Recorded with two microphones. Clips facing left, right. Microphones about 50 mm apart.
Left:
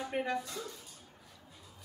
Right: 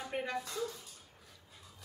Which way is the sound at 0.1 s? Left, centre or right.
Centre.